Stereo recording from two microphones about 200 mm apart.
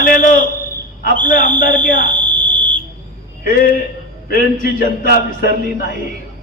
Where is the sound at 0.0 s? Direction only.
40° left (ahead or behind).